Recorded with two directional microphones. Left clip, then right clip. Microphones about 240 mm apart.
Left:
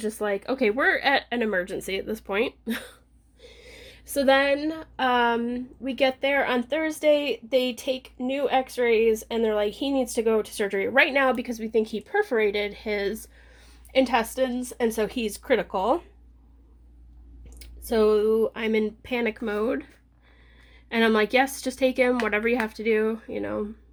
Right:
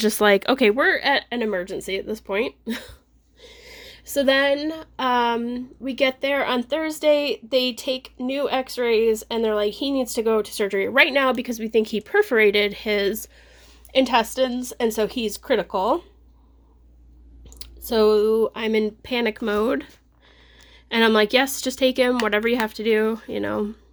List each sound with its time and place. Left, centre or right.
0.0 s speech: right
0.9 s speech: centre
17.6 s speech: centre
20.9 s speech: centre